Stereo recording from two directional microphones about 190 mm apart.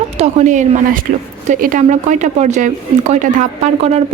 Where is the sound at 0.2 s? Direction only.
40° right (ahead or behind).